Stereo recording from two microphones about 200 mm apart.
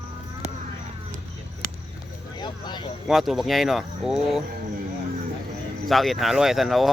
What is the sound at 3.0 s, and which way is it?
Speech, centre (ahead or behind).